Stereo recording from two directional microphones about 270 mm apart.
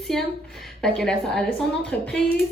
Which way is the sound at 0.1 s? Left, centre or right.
Centre.